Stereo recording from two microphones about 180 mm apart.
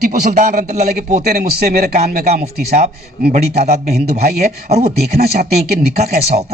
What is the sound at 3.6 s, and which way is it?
Speech, 40° right (ahead or behind).